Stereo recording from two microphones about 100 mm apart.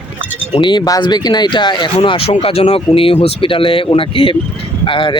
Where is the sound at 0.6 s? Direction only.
50° left (ahead or behind).